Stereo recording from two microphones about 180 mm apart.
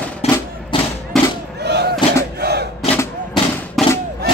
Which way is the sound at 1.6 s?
65° right (ahead or behind).